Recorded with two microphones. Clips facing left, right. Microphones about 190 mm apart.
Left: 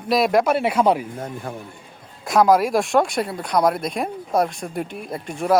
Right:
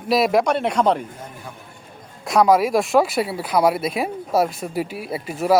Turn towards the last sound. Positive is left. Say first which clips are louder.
# right 2 dB
turn(degrees=-5)  # may be behind; listen again after turning